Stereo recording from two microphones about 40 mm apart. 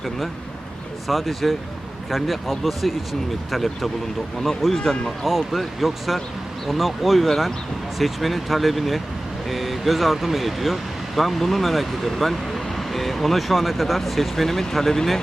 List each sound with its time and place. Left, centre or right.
1.0 s speech: centre
5.2 s speech: centre